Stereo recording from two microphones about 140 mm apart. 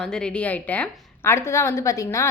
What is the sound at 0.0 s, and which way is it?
A woman's voice, 5° left (ahead or behind).